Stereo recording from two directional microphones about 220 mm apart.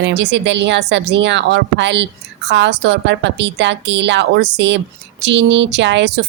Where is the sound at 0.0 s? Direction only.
50° right (ahead or behind).